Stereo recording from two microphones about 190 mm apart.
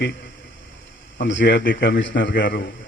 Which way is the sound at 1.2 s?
70° left (ahead or behind).